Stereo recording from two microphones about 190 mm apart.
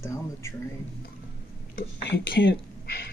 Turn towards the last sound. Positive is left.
turn(degrees=60)  # may be behind; listen again after turning